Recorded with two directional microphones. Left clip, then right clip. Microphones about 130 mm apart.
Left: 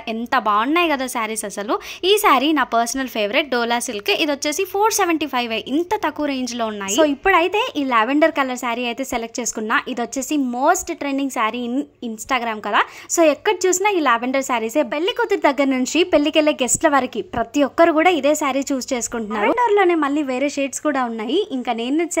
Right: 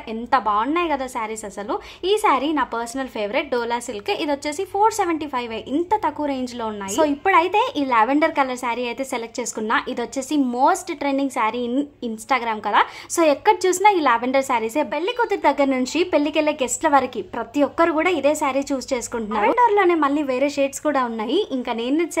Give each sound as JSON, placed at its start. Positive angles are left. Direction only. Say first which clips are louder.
{"t": 0.3, "sound": "a woman's voice", "louder": "left 2 dB", "side_deg": 30}